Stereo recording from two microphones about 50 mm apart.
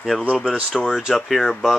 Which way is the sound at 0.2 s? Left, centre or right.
Centre.